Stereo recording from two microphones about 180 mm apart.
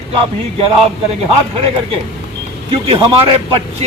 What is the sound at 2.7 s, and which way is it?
Speech, 30° right (ahead or behind).